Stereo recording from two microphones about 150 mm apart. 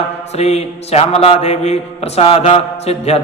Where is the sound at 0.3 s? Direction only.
45° left (ahead or behind).